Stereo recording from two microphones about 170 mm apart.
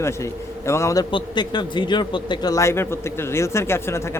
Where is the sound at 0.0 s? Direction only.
15° left (ahead or behind).